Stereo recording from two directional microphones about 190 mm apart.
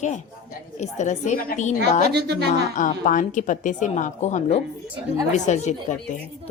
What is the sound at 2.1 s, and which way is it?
Speech, 60° right (ahead or behind).